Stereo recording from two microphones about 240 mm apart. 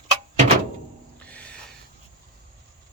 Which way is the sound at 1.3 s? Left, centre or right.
Centre.